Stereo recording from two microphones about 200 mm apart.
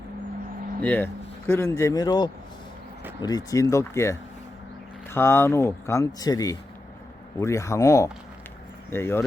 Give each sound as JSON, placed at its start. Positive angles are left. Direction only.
{"t": 0.8, "sound": "speech", "side_deg": 10}